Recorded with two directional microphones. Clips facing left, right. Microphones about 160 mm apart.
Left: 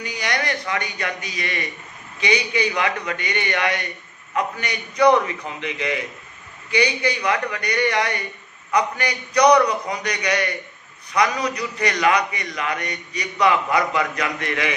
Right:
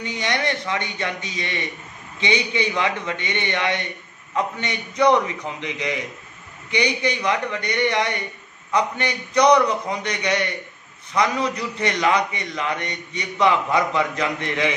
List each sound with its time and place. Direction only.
0.0 s a man's voice: 25° right (ahead or behind)